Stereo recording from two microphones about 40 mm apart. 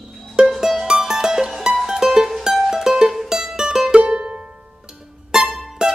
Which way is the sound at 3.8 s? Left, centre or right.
Right.